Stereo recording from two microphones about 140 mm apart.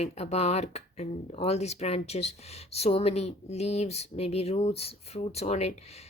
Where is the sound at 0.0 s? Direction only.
50° left (ahead or behind).